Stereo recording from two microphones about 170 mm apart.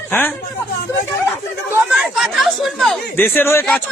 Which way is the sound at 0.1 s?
15° left (ahead or behind).